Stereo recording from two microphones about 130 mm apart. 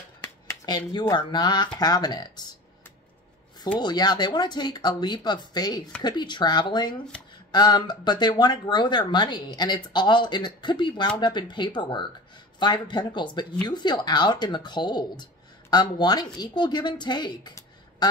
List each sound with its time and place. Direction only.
0.5 s speech: 30° left (ahead or behind)
3.8 s speech: 30° left (ahead or behind)